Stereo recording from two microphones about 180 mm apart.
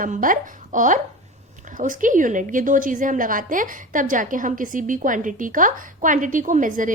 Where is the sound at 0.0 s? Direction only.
50° right (ahead or behind).